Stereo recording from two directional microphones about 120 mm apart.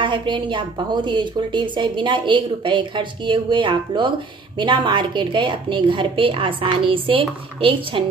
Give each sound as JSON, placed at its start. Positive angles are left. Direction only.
{"t": 0.0, "sound": "a woman's voice", "side_deg": -40}